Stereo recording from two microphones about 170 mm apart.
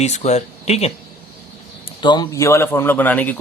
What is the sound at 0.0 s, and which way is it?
Speech, 40° left (ahead or behind).